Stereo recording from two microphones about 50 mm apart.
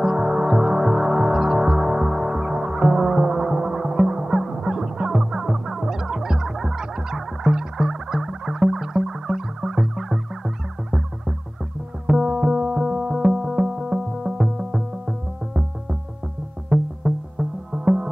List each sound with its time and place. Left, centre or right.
0.0 s music: centre
12.1 s music: centre